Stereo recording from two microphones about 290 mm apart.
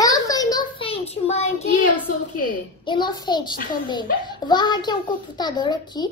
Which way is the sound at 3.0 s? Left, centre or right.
Centre.